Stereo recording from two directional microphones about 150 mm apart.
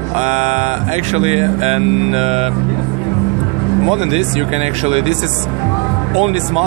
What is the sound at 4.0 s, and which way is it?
Speech, 45° right (ahead or behind).